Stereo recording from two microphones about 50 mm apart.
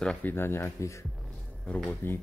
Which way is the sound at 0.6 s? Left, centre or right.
Left.